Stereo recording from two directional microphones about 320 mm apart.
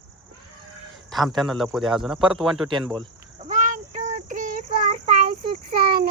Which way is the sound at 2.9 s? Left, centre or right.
Right.